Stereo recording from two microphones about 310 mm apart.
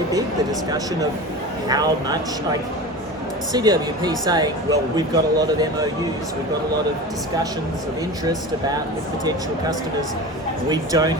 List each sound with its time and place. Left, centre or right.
1.6 s speech: centre
8.2 s speech: centre
10.7 s speech: centre